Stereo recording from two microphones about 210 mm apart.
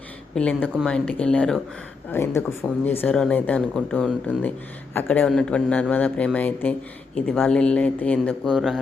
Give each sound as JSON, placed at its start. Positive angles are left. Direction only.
{"t": 0.3, "sound": "speech", "side_deg": 5}